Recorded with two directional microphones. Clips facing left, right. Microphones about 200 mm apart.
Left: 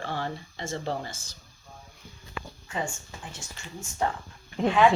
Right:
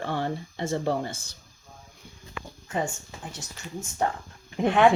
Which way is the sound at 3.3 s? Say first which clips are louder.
Right 6 dB; 40° right (ahead or behind).